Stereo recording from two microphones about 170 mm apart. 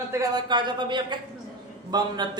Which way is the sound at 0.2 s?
25° right (ahead or behind).